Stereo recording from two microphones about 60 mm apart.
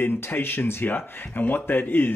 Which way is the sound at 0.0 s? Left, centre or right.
Left.